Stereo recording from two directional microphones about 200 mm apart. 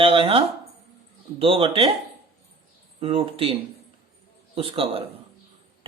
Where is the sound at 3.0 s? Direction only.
30° right (ahead or behind).